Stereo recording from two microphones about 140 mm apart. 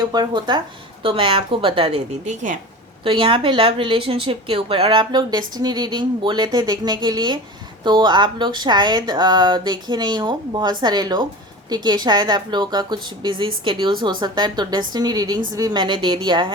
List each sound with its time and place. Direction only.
0.0 s speech: 30° right (ahead or behind)
2.2 s speech: 60° right (ahead or behind)
3.0 s speech: 40° right (ahead or behind)